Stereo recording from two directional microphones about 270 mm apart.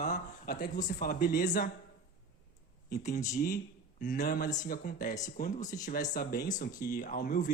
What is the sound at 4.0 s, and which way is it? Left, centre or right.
Speech, left.